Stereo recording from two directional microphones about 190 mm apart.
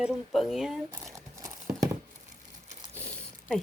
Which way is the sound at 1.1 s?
15° right (ahead or behind).